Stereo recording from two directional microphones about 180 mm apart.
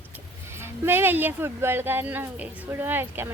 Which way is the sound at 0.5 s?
15° right (ahead or behind).